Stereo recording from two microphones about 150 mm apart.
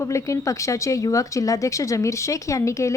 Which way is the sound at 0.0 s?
20° left (ahead or behind).